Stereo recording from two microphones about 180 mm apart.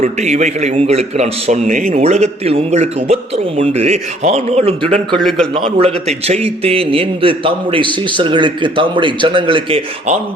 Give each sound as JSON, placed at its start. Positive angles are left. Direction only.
{"t": 0.0, "sound": "a man's voice", "side_deg": -40}
{"t": 1.9, "sound": "a man's voice", "side_deg": -35}
{"t": 5.1, "sound": "a man's voice", "side_deg": 0}
{"t": 5.5, "sound": "a man's voice", "side_deg": -30}